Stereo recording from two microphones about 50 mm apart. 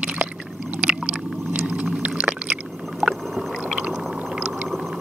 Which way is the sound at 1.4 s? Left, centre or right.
Right.